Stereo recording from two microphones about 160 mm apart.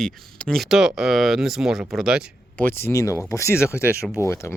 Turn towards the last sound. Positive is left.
turn(degrees=15)  # may be behind; listen again after turning